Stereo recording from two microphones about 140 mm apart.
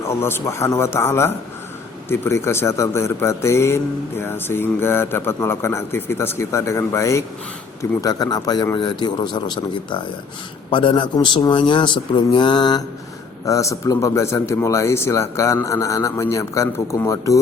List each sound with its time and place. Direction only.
0.1 s a man's voice: 15° left (ahead or behind)